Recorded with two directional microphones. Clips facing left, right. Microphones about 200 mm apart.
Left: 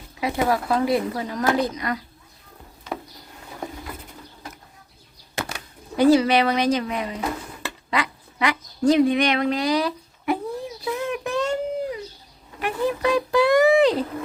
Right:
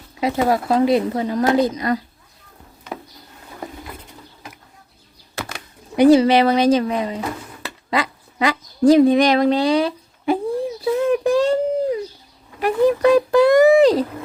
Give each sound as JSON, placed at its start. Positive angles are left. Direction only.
{"t": 0.2, "sound": "speech", "side_deg": -25}
{"t": 6.0, "sound": "speech", "side_deg": -25}
{"t": 7.9, "sound": "a sound", "side_deg": -30}
{"t": 12.6, "sound": "speech", "side_deg": -45}